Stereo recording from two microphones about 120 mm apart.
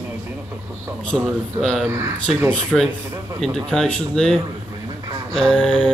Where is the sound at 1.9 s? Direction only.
20° right (ahead or behind).